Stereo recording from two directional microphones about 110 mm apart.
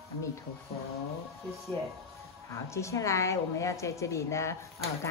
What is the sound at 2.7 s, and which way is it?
Speech, 25° left (ahead or behind).